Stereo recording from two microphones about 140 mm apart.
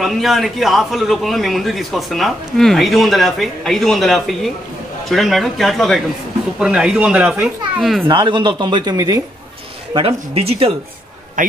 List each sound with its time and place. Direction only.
0.0 s a man's voice: centre (ahead or behind)
8.1 s speech: 35° right (ahead or behind)
9.9 s speech: 45° right (ahead or behind)
11.4 s speech: 75° right (ahead or behind)